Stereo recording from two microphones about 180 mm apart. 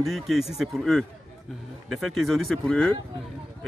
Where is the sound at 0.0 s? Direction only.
Centre (ahead or behind).